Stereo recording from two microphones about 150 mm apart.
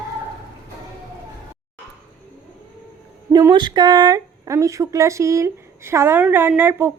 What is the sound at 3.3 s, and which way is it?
Speech, 25° right (ahead or behind).